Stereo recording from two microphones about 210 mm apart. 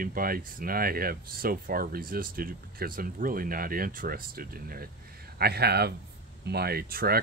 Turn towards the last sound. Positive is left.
turn(degrees=-45)  # may be behind; listen again after turning